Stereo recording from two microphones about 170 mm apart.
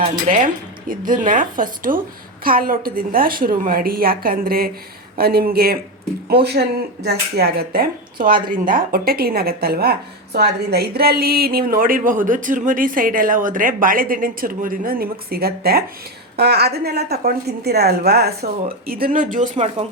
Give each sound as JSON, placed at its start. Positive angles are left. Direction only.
{"t": 0.3, "sound": "a woman's voice", "side_deg": -50}